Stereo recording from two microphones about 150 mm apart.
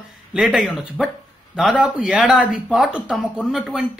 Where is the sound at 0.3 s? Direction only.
Centre (ahead or behind).